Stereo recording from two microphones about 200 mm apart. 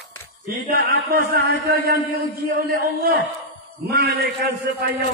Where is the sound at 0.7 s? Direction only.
50° right (ahead or behind).